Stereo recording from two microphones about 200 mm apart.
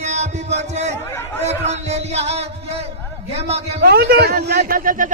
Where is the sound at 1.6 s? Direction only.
35° right (ahead or behind).